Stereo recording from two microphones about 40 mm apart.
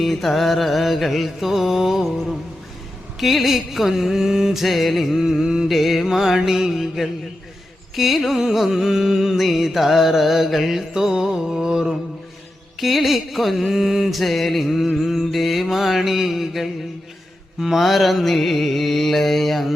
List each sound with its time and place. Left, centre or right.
0.0 s mantra: centre
3.2 s mantra: centre
5.2 s music: centre
5.6 s music: centre
7.9 s mantra: centre
8.4 s music: centre
10.9 s music: centre
12.8 s mantra: centre